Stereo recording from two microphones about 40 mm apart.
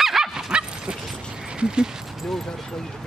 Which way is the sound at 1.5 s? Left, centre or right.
Right.